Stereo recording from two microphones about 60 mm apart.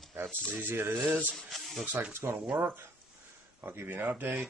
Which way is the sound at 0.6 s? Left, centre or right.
Right.